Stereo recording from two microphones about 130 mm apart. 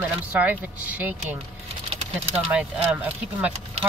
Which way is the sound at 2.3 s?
10° right (ahead or behind).